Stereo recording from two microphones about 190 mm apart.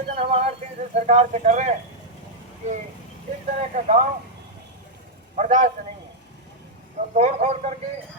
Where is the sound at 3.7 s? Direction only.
40° right (ahead or behind).